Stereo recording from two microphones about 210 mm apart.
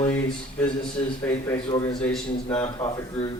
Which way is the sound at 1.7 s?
25° left (ahead or behind).